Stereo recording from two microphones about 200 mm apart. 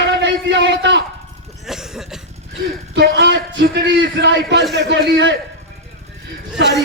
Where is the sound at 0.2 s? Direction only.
60° right (ahead or behind).